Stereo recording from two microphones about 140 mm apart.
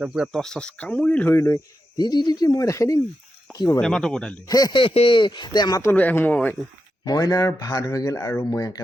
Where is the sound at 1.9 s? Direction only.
30° left (ahead or behind).